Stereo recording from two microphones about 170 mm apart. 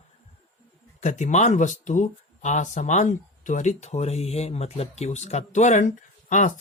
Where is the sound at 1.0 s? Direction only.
45° left (ahead or behind).